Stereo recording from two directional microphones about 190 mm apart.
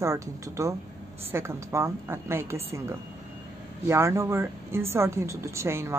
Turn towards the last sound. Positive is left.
turn(degrees=-15)  # may be behind; listen again after turning